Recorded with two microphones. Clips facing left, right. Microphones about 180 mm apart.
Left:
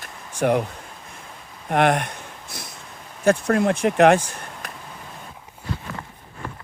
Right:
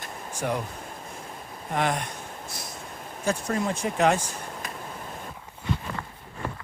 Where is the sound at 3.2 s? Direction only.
65° left (ahead or behind).